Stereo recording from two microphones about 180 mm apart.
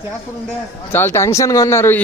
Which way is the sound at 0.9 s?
15° left (ahead or behind).